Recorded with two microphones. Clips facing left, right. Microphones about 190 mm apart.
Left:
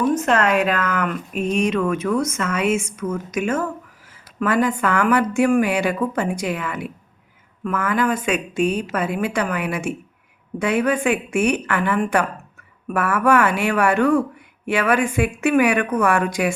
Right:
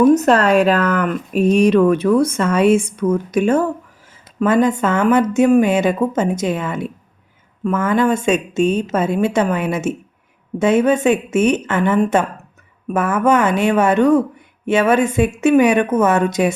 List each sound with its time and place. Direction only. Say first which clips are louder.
0.0 s a woman's voice: right 7 dB; 40° right (ahead or behind); by 16.5 s 20° right (ahead or behind)